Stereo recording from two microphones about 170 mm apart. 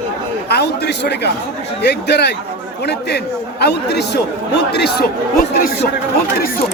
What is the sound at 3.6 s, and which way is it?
Speech, 75° left (ahead or behind).